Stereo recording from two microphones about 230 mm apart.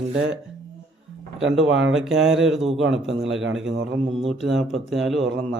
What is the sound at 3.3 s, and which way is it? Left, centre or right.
Speech, right.